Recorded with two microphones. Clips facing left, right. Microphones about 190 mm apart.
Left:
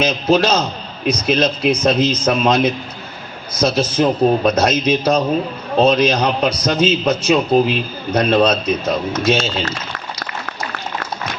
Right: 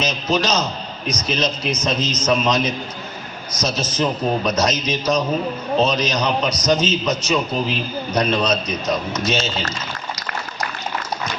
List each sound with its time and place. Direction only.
0.0 s a man's voice: 60° left (ahead or behind)